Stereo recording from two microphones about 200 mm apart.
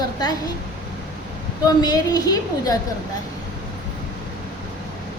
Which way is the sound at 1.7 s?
20° left (ahead or behind).